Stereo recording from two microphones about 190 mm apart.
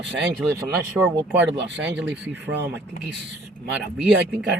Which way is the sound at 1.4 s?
70° right (ahead or behind).